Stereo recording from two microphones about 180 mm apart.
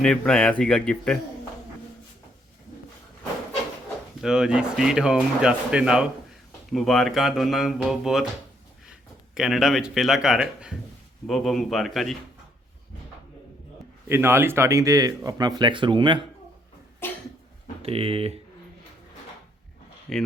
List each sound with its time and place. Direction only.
0.0 s speech: 5° left (ahead or behind)
4.2 s speech: 5° right (ahead or behind)
14.1 s speech: 15° right (ahead or behind)
17.0 s cough: 10° left (ahead or behind)
17.8 s speech: 30° right (ahead or behind)
20.1 s speech: centre (ahead or behind)